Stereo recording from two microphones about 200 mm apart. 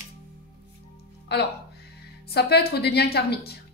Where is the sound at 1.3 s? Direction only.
55° left (ahead or behind).